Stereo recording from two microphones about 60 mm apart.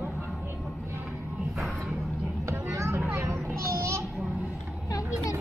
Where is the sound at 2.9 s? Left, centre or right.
Right.